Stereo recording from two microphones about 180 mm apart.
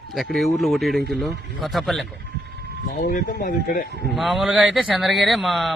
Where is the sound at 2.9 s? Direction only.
55° left (ahead or behind).